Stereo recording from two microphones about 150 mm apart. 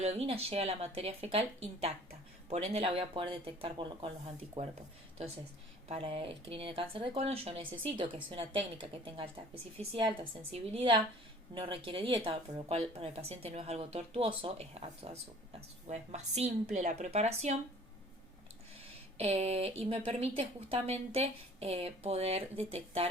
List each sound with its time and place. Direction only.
0.0 s speech: 45° right (ahead or behind)
4.6 s a woman's voice: 50° right (ahead or behind)
5.9 s a woman's voice: 35° right (ahead or behind)
19.1 s a woman's voice: 45° right (ahead or behind)